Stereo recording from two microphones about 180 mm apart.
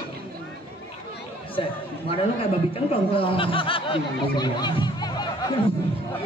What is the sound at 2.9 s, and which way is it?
Speech, 30° left (ahead or behind).